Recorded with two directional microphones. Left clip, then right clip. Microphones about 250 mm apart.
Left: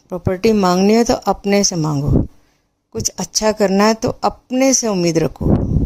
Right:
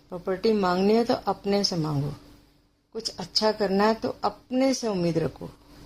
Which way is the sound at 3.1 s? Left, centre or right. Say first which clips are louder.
Left 7 dB; left.